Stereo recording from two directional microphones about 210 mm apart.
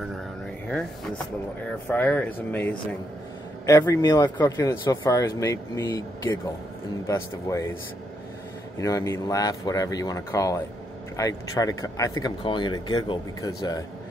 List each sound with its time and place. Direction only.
0.7 s speech: 5° left (ahead or behind)
8.7 s speech: 15° left (ahead or behind)